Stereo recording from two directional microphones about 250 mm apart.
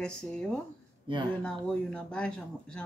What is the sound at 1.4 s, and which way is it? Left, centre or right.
Speech, centre.